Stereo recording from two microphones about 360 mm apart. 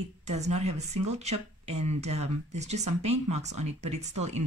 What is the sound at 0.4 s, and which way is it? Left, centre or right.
Speech, centre.